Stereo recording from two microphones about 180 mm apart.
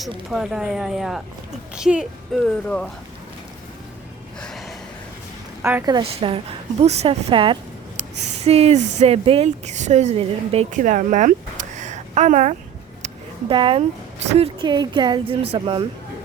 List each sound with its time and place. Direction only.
0.3 s a woman's voice: centre (ahead or behind)
4.4 s gasp: centre (ahead or behind)
5.8 s a woman's voice: 25° right (ahead or behind); by 12.5 s 40° right (ahead or behind)
13.5 s speech: 30° right (ahead or behind)